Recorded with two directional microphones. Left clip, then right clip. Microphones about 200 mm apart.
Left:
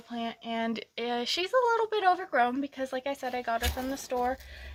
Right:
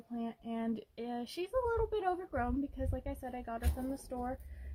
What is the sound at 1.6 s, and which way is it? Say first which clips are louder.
Speech: left 6 dB; 25° left (ahead or behind).